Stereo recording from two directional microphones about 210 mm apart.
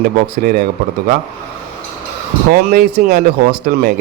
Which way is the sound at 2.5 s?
50° right (ahead or behind).